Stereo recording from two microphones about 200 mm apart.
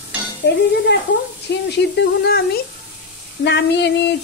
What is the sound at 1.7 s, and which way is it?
Speech, 55° left (ahead or behind).